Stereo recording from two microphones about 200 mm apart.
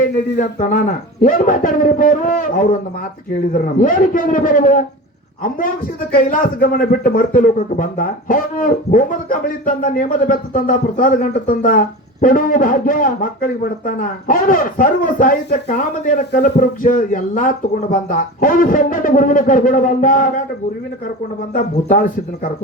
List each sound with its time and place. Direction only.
0.3 s speech: 40° left (ahead or behind)
6.1 s speech: 45° left (ahead or behind)
21.5 s speech: 45° left (ahead or behind)